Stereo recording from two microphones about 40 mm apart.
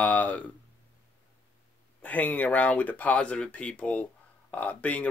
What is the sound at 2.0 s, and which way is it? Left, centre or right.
Speech, left.